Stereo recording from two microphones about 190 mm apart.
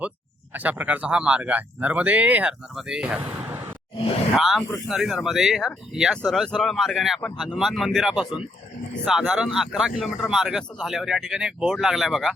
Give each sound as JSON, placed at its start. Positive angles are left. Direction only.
{"t": 0.5, "sound": "speech", "side_deg": -10}